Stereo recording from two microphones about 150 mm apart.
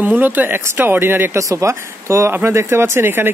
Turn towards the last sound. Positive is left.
turn(degrees=-15)  # may be behind; listen again after turning